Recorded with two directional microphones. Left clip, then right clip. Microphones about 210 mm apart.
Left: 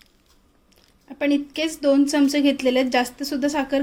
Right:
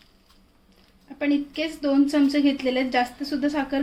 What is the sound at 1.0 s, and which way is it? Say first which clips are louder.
Speech: left 2 dB; 45° left (ahead or behind).